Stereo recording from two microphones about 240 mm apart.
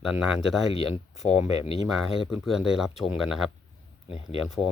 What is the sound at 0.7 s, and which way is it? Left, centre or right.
Speech, left.